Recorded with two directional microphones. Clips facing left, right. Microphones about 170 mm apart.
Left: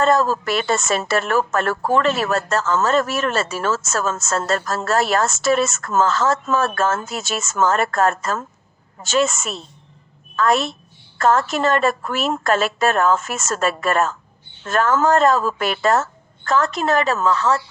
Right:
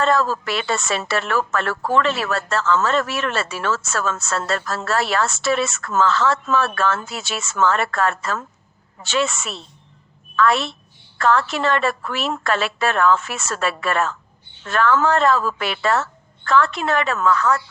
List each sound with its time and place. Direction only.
0.0 s a woman's voice: 45° left (ahead or behind); by 17.6 s 30° left (ahead or behind)